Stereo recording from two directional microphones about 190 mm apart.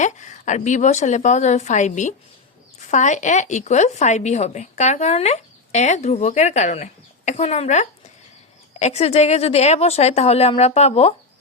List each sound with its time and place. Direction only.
0.0 s speech: 40° left (ahead or behind)